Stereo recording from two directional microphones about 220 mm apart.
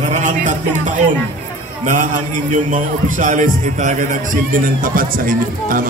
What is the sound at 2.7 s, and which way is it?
A man's voice, 35° right (ahead or behind).